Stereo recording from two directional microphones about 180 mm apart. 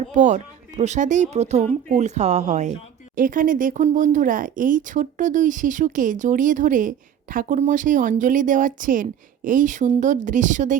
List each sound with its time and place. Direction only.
0.0 s speech: 40° right (ahead or behind)